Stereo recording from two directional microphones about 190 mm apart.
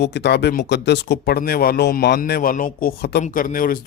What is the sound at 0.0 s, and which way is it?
Speech, 60° left (ahead or behind).